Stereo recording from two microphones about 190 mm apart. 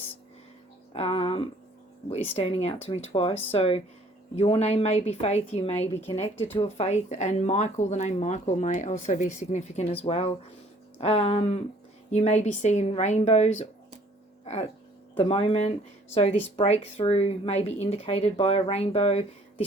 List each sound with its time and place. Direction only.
0.9 s a sound: 30° left (ahead or behind)
2.0 s speech: 35° left (ahead or behind)
6.2 s speech: 15° left (ahead or behind)
6.6 s speech: 35° left (ahead or behind)
14.4 s a sound: 35° left (ahead or behind)
15.1 s speech: 30° left (ahead or behind)